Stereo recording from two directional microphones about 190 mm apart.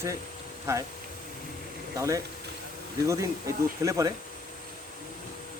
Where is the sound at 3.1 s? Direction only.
15° right (ahead or behind).